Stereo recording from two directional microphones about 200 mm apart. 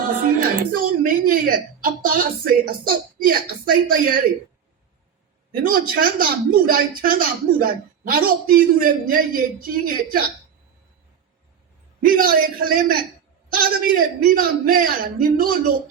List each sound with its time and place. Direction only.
0.3 s a man's voice: 45° right (ahead or behind)
5.5 s a man's voice: 45° right (ahead or behind)
12.0 s a man's voice: 45° right (ahead or behind)